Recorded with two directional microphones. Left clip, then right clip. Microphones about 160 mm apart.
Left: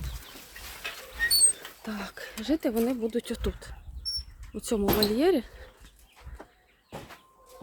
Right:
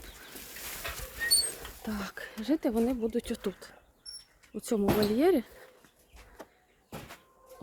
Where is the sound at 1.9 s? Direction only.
5° right (ahead or behind).